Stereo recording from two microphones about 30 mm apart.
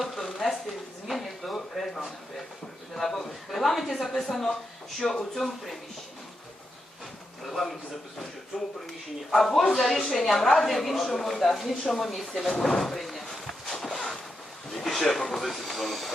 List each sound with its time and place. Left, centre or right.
1.0 s a sound: centre
2.9 s speech: centre
5.0 s speech: left
5.4 s speech: centre
7.5 s speech: centre
8.5 s speech: right
9.3 s speech: centre
12.5 s speech: centre
13.7 s a sound: centre
15.3 s speech: centre